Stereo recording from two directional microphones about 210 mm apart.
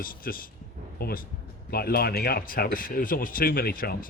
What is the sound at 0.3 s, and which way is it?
Speech, 45° left (ahead or behind).